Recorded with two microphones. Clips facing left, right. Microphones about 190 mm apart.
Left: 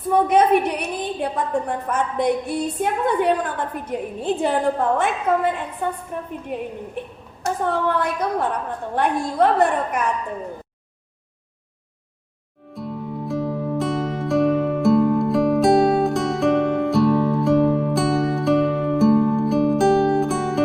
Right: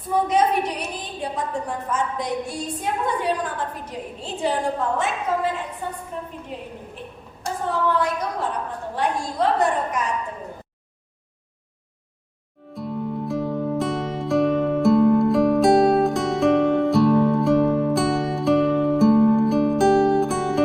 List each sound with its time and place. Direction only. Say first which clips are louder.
0.1 s a woman's voice: left 4 dB; 55° left (ahead or behind)
12.7 s music: right 2 dB; centre (ahead or behind)